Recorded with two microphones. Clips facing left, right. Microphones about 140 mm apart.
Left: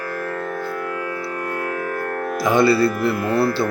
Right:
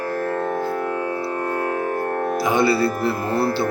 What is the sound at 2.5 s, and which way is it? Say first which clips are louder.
Speech: left 4 dB; 25° right (ahead or behind).